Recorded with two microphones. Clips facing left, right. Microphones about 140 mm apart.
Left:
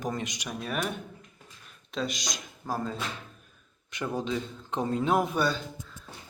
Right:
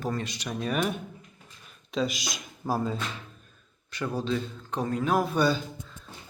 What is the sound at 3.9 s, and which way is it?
Speech, 20° left (ahead or behind).